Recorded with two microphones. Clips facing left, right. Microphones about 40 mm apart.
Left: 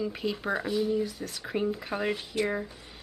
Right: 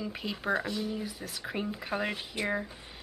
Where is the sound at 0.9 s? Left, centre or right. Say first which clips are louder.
Left 7 dB; centre.